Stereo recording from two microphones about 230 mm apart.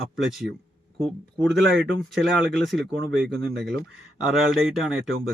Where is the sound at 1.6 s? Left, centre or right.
Right.